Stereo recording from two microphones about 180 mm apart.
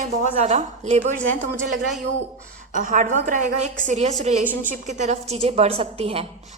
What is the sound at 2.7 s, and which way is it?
A woman's voice, 45° right (ahead or behind).